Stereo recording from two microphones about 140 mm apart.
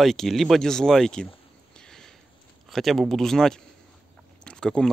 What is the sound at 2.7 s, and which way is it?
Speech, centre (ahead or behind).